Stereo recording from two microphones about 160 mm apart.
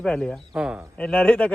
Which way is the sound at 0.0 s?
5° left (ahead or behind).